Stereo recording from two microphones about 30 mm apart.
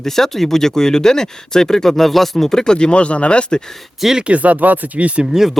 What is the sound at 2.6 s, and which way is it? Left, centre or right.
Speech, left.